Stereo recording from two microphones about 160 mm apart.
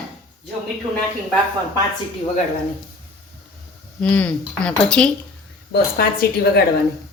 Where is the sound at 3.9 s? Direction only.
5° left (ahead or behind).